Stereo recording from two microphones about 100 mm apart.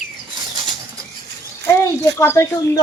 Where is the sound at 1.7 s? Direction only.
25° left (ahead or behind).